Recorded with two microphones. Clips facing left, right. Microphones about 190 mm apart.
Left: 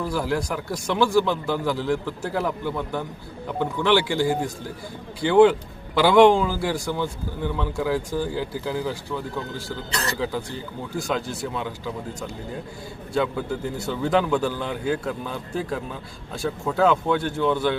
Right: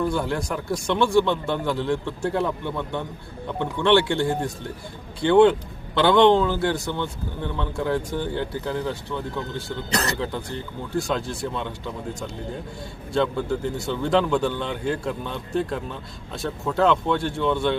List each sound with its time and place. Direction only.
0.2 s a man's voice: 5° left (ahead or behind)
9.9 s speech: 40° right (ahead or behind)
10.9 s a man's voice: 5° left (ahead or behind)
13.1 s a man's voice: 5° left (ahead or behind)